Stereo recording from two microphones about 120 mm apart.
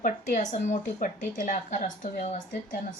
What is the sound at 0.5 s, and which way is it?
A woman's voice, 85° left.